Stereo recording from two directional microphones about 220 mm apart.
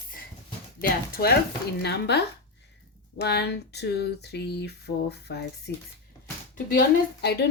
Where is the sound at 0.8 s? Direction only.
40° left (ahead or behind).